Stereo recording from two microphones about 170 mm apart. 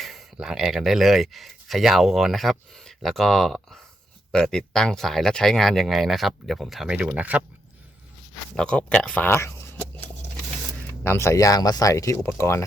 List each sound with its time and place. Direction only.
0.0 s speech: centre (ahead or behind)
8.5 s speech: 5° left (ahead or behind)
11.0 s speech: 15° left (ahead or behind)